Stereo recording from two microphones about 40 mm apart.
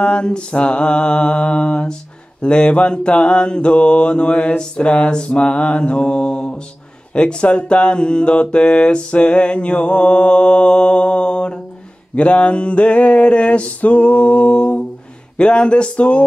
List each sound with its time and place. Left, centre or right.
0.0 s speech: left
12.2 s a sound: left
15.3 s speech: left